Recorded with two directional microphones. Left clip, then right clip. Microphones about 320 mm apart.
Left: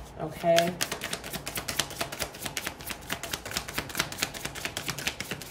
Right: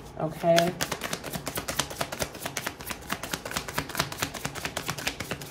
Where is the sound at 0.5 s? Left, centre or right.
Centre.